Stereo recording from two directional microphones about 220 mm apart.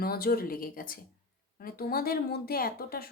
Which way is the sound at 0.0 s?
45° left (ahead or behind).